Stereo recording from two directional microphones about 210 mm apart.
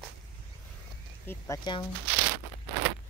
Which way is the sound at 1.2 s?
15° left (ahead or behind).